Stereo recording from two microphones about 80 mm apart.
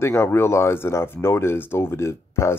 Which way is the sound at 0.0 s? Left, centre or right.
Left.